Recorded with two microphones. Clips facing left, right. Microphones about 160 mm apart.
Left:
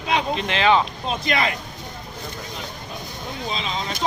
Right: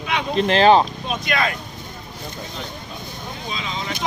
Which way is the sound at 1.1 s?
25° left (ahead or behind).